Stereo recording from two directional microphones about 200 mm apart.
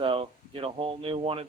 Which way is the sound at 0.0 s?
25° right (ahead or behind).